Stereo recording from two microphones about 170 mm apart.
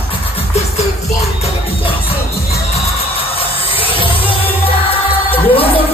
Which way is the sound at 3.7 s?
30° left (ahead or behind).